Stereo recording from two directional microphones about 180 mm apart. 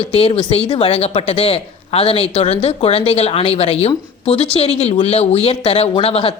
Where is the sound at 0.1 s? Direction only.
30° left (ahead or behind).